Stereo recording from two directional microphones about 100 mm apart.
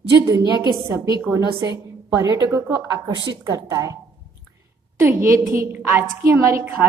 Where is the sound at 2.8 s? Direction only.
45° right (ahead or behind).